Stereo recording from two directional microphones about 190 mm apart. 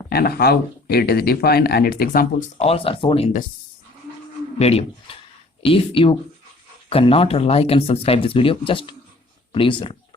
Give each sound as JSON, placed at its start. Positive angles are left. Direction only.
{"t": 0.1, "sound": "speech", "side_deg": 55}
{"t": 2.6, "sound": "speech", "side_deg": 30}
{"t": 4.5, "sound": "speech", "side_deg": 35}